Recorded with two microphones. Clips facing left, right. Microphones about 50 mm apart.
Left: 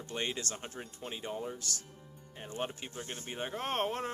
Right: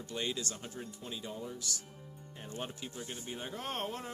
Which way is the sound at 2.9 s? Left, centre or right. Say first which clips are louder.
Left 1 dB; left.